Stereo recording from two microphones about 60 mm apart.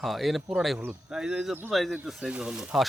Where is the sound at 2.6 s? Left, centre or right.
Centre.